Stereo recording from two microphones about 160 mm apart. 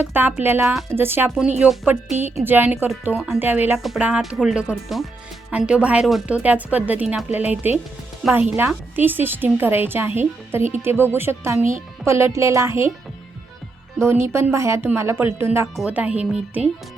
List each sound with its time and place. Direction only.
0.0 s speech: 10° right (ahead or behind)
0.6 s speech: centre (ahead or behind)
0.9 s speech: 15° right (ahead or behind)
14.0 s speech: 15° right (ahead or behind)